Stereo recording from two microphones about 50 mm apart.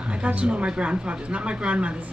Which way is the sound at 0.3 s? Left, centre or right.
Right.